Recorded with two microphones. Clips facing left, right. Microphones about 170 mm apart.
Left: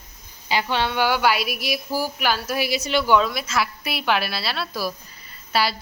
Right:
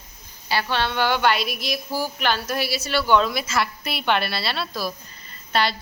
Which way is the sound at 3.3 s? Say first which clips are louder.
Even; centre (ahead or behind).